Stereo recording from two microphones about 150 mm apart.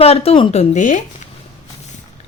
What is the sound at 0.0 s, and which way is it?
Speech, 40° left (ahead or behind).